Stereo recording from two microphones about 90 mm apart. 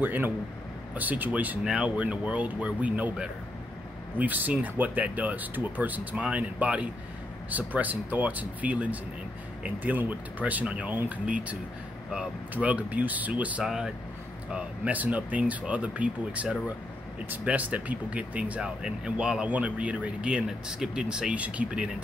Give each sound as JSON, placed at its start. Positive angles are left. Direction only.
{"t": 0.0, "sound": "speech", "side_deg": -20}
{"t": 13.7, "sound": "speech", "side_deg": -5}
{"t": 14.5, "sound": "speech", "side_deg": -15}